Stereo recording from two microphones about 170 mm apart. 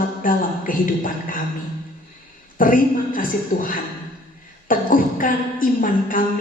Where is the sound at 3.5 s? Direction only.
65° left (ahead or behind).